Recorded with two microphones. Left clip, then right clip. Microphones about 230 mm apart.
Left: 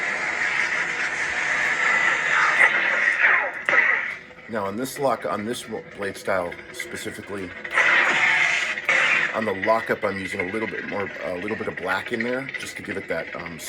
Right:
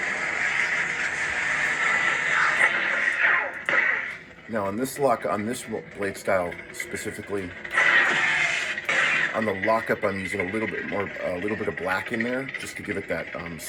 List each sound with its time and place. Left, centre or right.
0.0 s a sound: centre
4.5 s speech: centre
7.7 s music: centre
9.7 s speech: centre
10.2 s speech: centre